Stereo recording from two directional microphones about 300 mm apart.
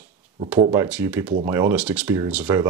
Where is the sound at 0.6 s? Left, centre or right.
Centre.